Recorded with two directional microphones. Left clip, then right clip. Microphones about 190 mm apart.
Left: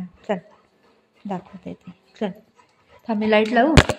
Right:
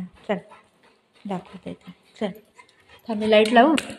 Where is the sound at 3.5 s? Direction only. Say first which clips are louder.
Right 2 dB; 30° right (ahead or behind).